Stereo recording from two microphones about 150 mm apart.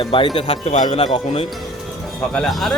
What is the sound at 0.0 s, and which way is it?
Speech, 35° left (ahead or behind).